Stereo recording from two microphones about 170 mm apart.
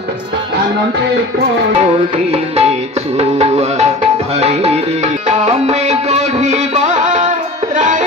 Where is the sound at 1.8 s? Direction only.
35° right (ahead or behind).